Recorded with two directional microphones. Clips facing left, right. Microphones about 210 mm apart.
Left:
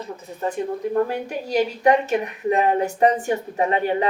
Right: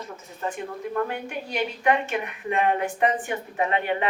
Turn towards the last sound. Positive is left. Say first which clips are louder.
# left 4 dB
turn(degrees=35)  # may be behind; listen again after turning